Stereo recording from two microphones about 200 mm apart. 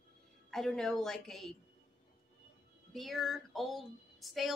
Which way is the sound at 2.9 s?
Centre (ahead or behind).